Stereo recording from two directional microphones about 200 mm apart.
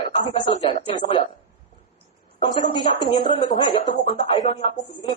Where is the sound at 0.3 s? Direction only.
30° left (ahead or behind).